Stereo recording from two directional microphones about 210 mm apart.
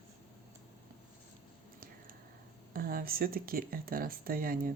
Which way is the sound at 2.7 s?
45° right (ahead or behind).